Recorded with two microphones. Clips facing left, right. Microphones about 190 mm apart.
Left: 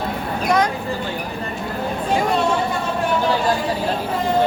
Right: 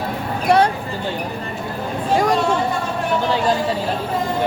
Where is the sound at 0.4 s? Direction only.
30° right (ahead or behind).